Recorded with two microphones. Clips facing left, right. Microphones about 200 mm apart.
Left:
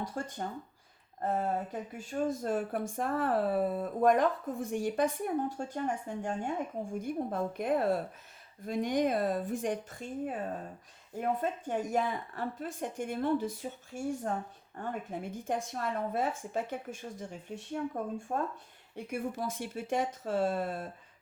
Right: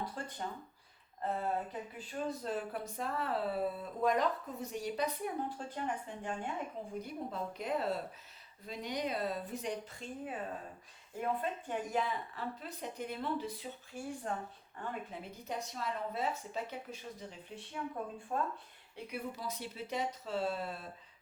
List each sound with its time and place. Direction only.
0.0 s speech: 45° left (ahead or behind)